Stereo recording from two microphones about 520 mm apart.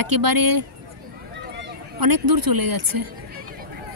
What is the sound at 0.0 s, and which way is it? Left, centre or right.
Speech, right.